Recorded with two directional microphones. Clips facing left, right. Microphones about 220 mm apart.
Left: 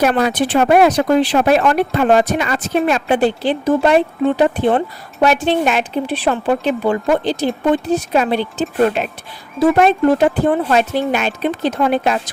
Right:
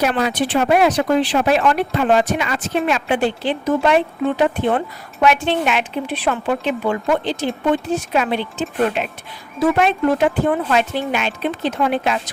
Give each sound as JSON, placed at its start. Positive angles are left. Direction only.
{"t": 0.0, "sound": "a woman's voice", "side_deg": 50}